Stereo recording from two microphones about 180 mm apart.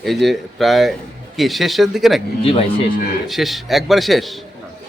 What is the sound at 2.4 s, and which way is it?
Speech, 30° left (ahead or behind).